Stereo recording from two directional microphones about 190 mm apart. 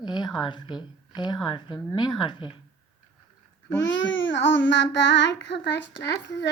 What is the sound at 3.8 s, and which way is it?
Child singing, 75° left (ahead or behind).